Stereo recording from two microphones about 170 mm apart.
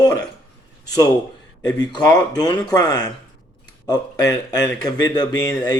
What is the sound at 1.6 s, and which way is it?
Speech, 25° left (ahead or behind).